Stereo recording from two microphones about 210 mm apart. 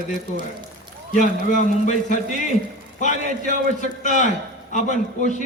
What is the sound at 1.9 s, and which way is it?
Speech, 35° left (ahead or behind).